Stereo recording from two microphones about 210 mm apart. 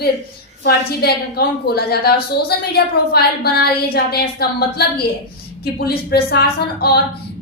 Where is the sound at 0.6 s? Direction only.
50° left (ahead or behind).